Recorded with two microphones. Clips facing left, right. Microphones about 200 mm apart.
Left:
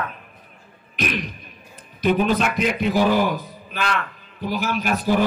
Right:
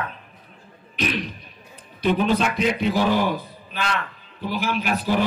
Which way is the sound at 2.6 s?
10° left (ahead or behind).